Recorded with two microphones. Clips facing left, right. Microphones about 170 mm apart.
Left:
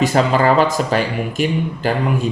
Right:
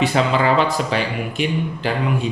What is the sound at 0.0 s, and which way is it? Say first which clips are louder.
Speech: left 3 dB; 45° left (ahead or behind).